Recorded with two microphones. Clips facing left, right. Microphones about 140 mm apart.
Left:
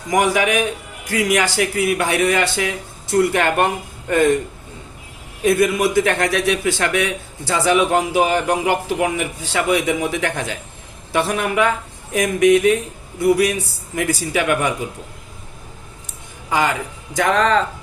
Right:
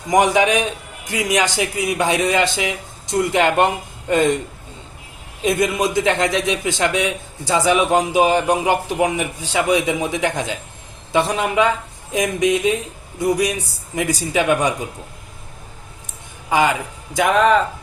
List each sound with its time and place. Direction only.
0.1 s a man's voice: 20° right (ahead or behind)
5.4 s a man's voice: 20° right (ahead or behind)
16.5 s a man's voice: 15° right (ahead or behind)